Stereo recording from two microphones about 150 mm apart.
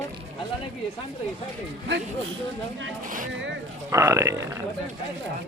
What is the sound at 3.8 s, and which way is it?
Speech, 20° right (ahead or behind).